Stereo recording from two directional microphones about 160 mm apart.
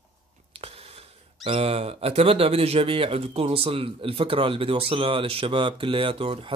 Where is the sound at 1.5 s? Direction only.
40° right (ahead or behind).